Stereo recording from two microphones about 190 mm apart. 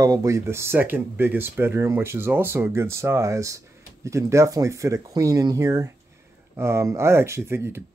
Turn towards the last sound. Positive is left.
turn(degrees=-15)  # may be behind; listen again after turning